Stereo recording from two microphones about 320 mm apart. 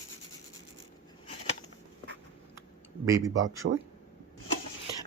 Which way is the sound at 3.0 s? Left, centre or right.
Centre.